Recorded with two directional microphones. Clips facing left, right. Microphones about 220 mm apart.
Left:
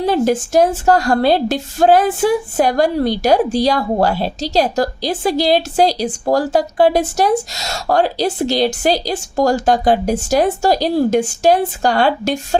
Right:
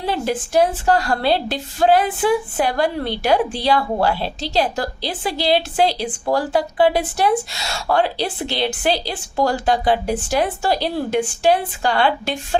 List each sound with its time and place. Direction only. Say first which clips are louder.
0.0 s a woman's voice: left 7 dB; 45° left (ahead or behind)